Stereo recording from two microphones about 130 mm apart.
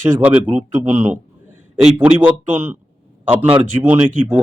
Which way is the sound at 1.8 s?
10° right (ahead or behind).